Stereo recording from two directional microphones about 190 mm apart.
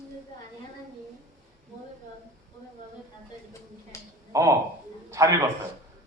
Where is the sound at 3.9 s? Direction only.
15° left (ahead or behind).